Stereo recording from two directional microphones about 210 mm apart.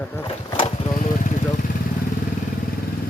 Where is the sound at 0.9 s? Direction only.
35° left (ahead or behind).